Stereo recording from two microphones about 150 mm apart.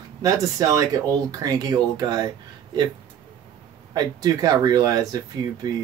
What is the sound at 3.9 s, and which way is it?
Speech, 25° right (ahead or behind).